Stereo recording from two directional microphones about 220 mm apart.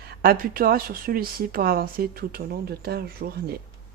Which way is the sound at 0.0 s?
45° right (ahead or behind).